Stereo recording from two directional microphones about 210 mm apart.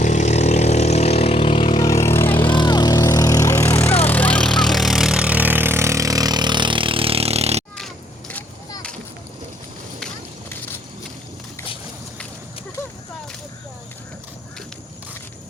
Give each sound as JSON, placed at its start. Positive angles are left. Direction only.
{"t": 0.0, "sound": "vehicle", "side_deg": 35}
{"t": 2.4, "sound": "vehicle", "side_deg": 20}
{"t": 7.8, "sound": "a sound", "side_deg": 5}